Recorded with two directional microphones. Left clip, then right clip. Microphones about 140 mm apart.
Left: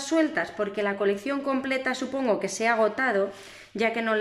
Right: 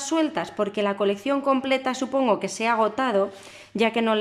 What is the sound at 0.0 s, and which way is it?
Speech, 15° right (ahead or behind).